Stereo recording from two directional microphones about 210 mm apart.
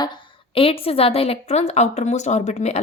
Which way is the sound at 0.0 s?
20° left (ahead or behind).